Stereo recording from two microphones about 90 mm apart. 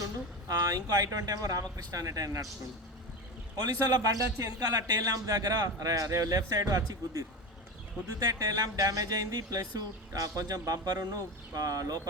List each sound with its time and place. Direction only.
0.0 s speech: 40° right (ahead or behind)
3.6 s speech: 45° right (ahead or behind)